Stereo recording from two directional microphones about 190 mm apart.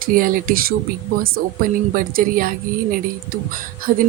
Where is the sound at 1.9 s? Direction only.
50° right (ahead or behind).